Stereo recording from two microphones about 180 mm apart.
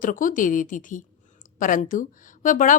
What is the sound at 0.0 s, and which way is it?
Speech, 50° left (ahead or behind).